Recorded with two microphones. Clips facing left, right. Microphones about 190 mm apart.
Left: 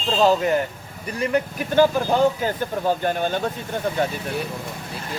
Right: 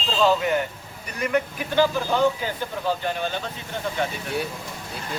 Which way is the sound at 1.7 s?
45° left (ahead or behind).